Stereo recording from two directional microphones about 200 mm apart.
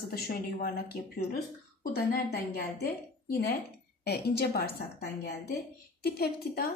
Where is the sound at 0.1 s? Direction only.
50° left (ahead or behind).